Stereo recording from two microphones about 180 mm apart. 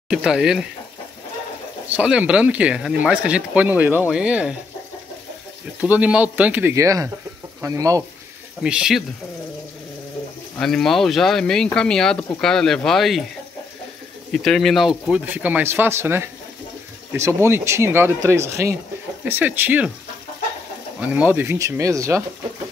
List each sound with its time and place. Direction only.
0.1 s speech: 5° right (ahead or behind)
1.9 s speech: 5° right (ahead or behind)
5.8 s speech: 5° right (ahead or behind)
8.6 s speech: 5° right (ahead or behind)
10.6 s speech: centre (ahead or behind)
14.3 s speech: centre (ahead or behind)
21.0 s speech: 5° right (ahead or behind)